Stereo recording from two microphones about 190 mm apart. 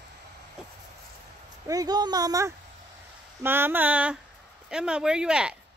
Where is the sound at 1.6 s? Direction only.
20° right (ahead or behind).